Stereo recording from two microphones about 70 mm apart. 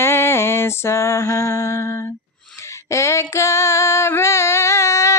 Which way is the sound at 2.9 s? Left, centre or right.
Left.